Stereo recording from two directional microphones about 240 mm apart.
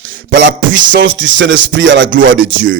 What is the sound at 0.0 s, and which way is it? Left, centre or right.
Music, right.